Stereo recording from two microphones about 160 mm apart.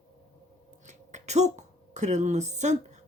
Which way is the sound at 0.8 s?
45° right (ahead or behind).